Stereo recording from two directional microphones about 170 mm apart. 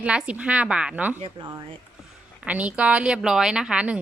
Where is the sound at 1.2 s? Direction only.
30° right (ahead or behind).